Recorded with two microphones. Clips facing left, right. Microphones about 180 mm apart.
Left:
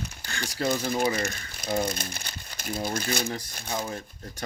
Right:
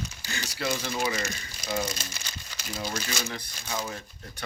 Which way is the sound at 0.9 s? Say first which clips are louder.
Left 4 dB; 55° left (ahead or behind).